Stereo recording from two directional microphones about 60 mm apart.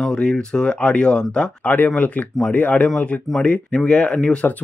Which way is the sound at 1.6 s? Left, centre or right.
Left.